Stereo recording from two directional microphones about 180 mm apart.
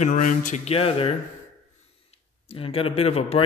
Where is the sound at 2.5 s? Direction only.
30° left (ahead or behind).